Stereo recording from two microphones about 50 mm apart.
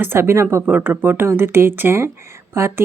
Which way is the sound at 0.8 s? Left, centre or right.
Right.